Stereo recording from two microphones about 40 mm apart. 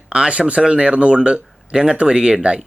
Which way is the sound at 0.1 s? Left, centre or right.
Right.